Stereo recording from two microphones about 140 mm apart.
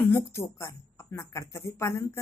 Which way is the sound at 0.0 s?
15° left (ahead or behind).